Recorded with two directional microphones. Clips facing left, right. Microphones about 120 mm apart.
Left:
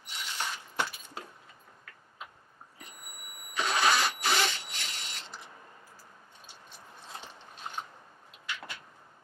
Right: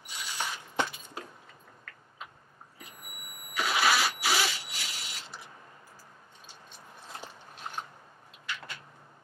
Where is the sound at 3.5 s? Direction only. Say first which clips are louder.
Even; 5° right (ahead or behind).